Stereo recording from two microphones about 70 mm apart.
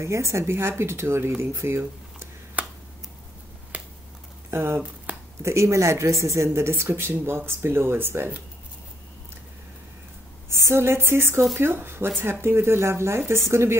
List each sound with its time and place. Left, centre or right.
0.0 s speech: right
2.6 s finger snapping: right
3.7 s tick-tock: right
4.5 s speech: right
5.4 s speech: right
10.7 s speech: right